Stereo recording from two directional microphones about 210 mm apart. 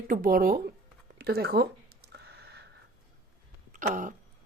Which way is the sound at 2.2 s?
50° right (ahead or behind).